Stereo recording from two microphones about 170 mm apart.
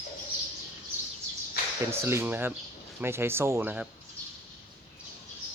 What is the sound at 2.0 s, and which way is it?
Speech, 15° right (ahead or behind).